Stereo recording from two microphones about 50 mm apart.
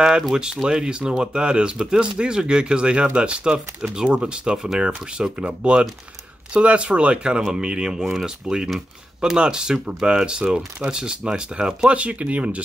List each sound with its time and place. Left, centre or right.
0.6 s speech: centre